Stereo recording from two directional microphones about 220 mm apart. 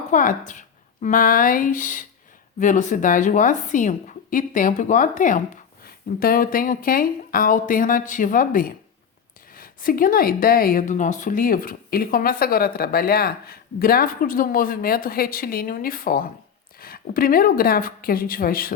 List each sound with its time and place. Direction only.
0.1 s speech: 35° left (ahead or behind)